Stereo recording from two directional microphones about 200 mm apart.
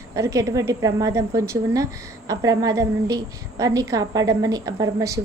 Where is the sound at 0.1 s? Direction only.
15° right (ahead or behind).